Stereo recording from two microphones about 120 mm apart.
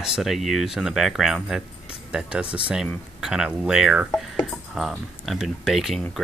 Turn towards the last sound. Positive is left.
turn(degrees=0)  # may be behind; listen again after turning